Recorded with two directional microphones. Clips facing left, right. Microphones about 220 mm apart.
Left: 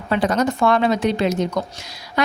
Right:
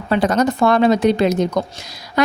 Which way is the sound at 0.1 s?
40° right (ahead or behind).